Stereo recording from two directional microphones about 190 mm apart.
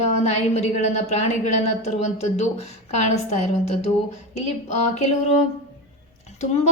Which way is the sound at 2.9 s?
35° left (ahead or behind).